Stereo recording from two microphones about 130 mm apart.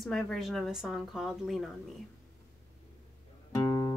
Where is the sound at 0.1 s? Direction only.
Centre (ahead or behind).